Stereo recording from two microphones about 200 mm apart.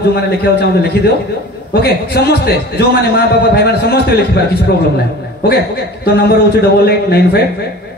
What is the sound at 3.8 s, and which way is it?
Speech, 55° left (ahead or behind).